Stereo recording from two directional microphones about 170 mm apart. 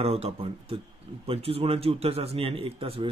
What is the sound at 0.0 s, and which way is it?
A man's voice, 35° right (ahead or behind).